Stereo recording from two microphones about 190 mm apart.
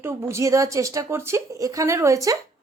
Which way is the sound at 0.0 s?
10° right (ahead or behind).